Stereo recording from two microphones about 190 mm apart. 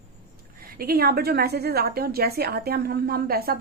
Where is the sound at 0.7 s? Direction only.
55° right (ahead or behind).